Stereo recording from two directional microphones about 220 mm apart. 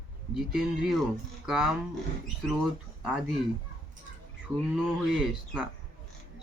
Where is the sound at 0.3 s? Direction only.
Centre (ahead or behind).